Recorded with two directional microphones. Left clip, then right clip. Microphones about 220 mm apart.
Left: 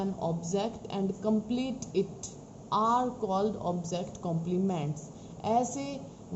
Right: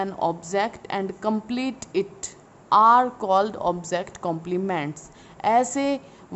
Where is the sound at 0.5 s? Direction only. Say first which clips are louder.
Right 8 dB; 30° right (ahead or behind).